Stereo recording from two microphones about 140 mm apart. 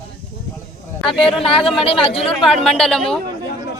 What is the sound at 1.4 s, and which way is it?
Speech, 40° left (ahead or behind).